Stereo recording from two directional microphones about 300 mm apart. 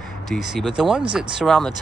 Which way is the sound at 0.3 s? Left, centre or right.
Centre.